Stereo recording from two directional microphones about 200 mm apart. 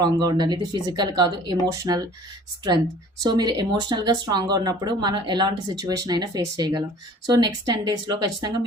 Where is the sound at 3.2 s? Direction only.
20° right (ahead or behind).